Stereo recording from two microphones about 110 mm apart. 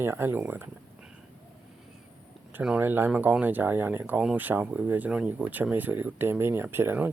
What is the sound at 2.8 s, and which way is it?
Speech, 20° right (ahead or behind).